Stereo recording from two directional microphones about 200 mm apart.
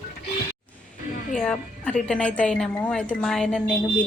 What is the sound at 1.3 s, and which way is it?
A woman's voice, 5° left (ahead or behind).